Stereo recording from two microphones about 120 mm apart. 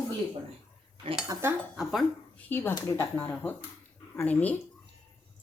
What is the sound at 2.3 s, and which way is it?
Speech, 15° left (ahead or behind).